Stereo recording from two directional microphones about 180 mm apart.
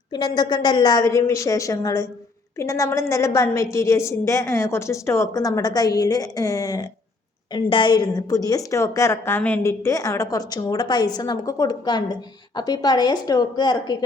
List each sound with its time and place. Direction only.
0.1 s a woman's voice: 25° left (ahead or behind)